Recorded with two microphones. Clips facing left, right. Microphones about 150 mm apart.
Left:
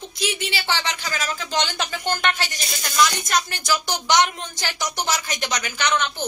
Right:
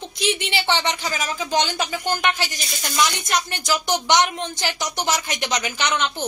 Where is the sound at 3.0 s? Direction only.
20° right (ahead or behind).